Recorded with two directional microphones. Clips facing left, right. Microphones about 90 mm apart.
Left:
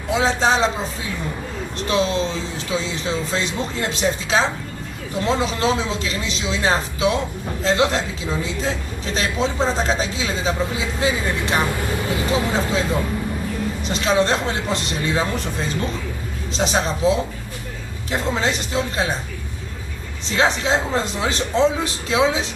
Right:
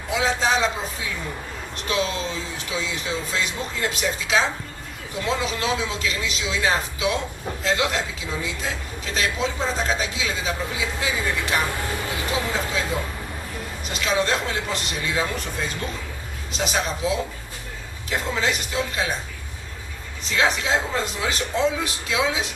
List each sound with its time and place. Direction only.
0.1 s a man's voice: 35° left (ahead or behind)
13.8 s a man's voice: 35° left (ahead or behind)
20.2 s a man's voice: 30° left (ahead or behind)